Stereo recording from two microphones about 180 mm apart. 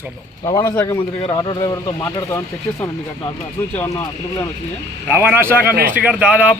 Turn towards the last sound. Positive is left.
turn(degrees=-10)  # may be behind; listen again after turning